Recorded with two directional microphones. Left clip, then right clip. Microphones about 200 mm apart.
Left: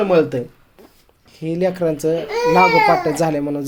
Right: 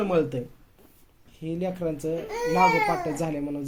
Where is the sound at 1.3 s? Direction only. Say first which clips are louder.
Left 11 dB; 40° left (ahead or behind).